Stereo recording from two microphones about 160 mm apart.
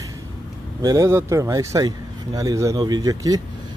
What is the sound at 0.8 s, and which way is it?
Speech, 20° right (ahead or behind).